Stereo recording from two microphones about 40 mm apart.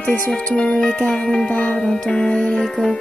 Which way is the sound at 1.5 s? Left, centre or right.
Left.